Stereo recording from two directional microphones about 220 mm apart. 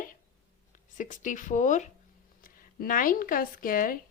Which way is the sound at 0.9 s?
35° left (ahead or behind).